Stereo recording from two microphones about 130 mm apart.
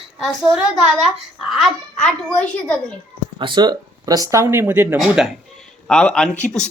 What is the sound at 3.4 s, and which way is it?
Speech, 35° right (ahead or behind).